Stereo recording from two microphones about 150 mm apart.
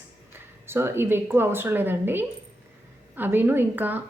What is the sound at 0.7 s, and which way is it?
A woman's voice, 15° right (ahead or behind).